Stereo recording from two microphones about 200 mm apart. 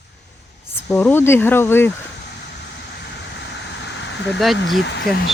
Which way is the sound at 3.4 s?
60° left (ahead or behind).